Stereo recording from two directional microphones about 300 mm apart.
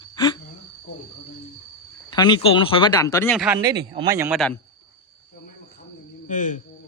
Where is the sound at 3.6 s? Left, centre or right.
Centre.